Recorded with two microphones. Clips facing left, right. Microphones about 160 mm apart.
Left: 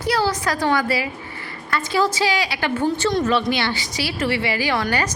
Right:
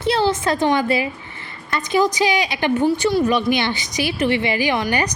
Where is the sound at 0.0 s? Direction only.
25° right (ahead or behind).